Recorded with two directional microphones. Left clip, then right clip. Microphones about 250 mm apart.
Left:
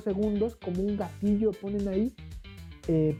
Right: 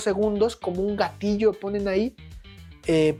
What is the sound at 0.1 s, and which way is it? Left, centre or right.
Speech, right.